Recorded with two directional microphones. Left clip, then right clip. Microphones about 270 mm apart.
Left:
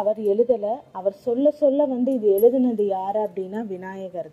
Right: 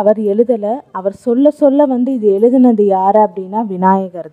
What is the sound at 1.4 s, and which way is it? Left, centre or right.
Speech, right.